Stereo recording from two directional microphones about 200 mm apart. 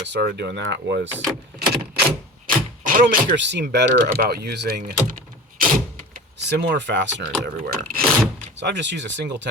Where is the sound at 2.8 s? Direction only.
45° right (ahead or behind).